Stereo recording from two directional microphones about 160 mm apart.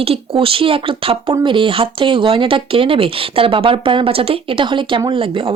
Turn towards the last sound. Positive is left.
turn(degrees=-30)  # may be behind; listen again after turning